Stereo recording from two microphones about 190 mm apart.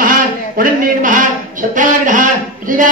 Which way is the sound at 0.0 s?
45° right (ahead or behind).